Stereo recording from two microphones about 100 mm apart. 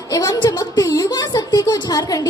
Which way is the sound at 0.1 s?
40° left (ahead or behind).